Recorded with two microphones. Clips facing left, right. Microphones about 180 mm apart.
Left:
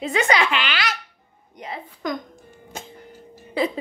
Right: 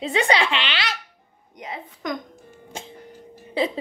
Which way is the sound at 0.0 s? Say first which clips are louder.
Even; 30° right (ahead or behind).